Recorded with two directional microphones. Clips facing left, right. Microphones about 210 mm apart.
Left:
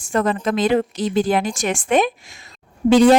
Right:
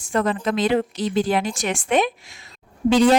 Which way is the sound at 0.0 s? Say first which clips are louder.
Left 2 dB; 45° left (ahead or behind).